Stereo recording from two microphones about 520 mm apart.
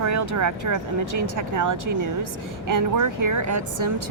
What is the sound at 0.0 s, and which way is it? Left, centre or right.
A woman's voice, right.